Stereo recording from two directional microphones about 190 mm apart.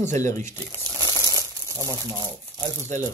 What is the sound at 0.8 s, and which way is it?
Crumpling, 20° right (ahead or behind).